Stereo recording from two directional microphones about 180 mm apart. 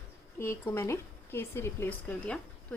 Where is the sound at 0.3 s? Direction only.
15° left (ahead or behind).